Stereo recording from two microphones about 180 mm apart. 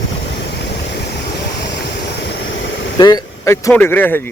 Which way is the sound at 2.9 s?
25° left (ahead or behind).